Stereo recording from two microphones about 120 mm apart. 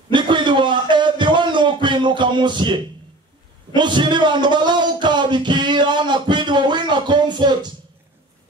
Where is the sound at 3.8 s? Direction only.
40° right (ahead or behind).